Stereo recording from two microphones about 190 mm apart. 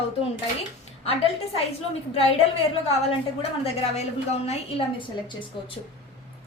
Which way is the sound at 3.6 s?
35° left (ahead or behind).